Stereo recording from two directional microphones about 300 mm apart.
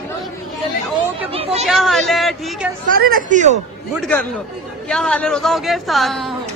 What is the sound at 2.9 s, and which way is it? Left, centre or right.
Speech, right.